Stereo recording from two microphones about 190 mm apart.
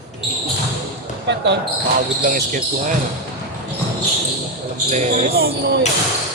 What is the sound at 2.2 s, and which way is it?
Speech, 45° right (ahead or behind).